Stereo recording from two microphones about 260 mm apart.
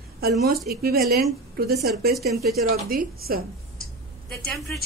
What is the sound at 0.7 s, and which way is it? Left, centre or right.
A woman's voice, right.